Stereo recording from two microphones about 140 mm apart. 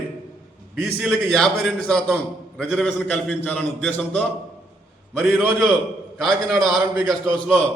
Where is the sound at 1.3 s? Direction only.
5° left (ahead or behind).